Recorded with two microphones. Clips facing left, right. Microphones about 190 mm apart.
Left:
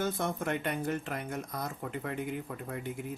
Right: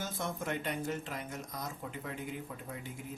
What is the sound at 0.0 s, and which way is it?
Speech, 60° left (ahead or behind).